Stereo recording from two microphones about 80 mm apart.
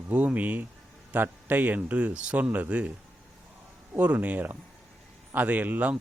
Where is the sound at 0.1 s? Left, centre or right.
Centre.